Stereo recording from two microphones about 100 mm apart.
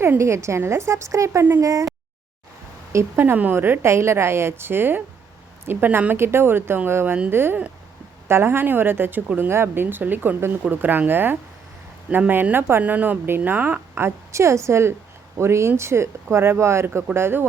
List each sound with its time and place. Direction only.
0.0 s a woman's voice: 25° right (ahead or behind)
2.9 s a woman's voice: 25° right (ahead or behind)